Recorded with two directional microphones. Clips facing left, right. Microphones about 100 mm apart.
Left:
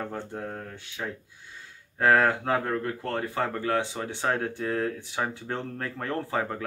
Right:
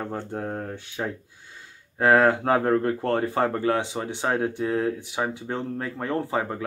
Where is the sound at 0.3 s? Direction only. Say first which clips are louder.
Right 5 dB; 30° right (ahead or behind).